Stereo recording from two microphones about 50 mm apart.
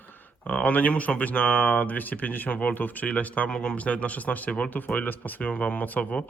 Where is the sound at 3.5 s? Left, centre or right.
Centre.